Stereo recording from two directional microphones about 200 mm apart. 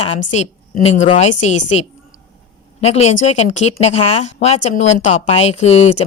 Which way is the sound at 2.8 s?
35° left (ahead or behind).